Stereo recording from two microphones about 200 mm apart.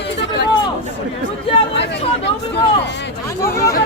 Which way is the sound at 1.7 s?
60° left (ahead or behind).